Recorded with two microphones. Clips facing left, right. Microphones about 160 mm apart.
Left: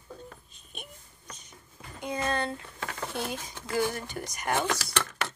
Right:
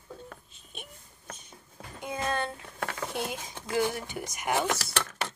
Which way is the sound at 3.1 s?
20° right (ahead or behind).